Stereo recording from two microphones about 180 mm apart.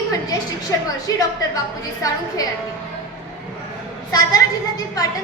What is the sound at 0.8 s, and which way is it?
Speech, 20° left (ahead or behind).